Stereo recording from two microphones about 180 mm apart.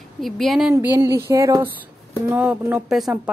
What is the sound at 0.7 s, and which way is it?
Speech, 15° right (ahead or behind).